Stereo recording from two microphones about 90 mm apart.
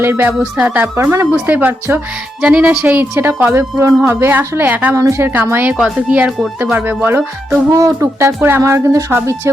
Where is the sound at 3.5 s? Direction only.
30° right (ahead or behind).